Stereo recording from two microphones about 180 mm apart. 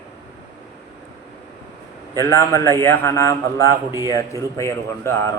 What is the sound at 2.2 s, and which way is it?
A man's voice, 15° left (ahead or behind).